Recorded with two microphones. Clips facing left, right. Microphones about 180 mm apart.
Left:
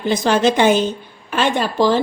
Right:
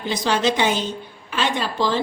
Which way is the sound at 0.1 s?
50° left (ahead or behind).